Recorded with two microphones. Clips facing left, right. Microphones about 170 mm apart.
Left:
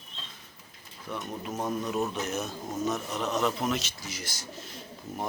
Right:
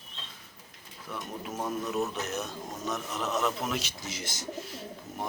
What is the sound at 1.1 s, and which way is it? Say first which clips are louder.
Speech: left 2 dB; 5° right (ahead or behind).